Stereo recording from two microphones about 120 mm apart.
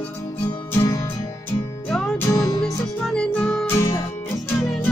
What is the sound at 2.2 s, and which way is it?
Music, 30° left (ahead or behind).